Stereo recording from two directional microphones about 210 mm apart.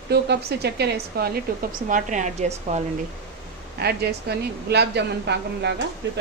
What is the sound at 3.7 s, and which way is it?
A woman's voice, 50° right (ahead or behind).